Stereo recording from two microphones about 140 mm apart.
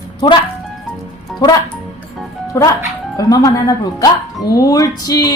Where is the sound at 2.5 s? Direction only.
25° left (ahead or behind).